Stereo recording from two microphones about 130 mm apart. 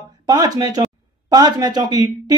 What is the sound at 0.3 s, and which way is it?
A man's voice, 30° right (ahead or behind).